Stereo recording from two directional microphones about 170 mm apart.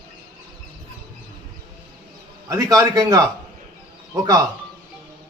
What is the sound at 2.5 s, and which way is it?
Speech, 20° right (ahead or behind).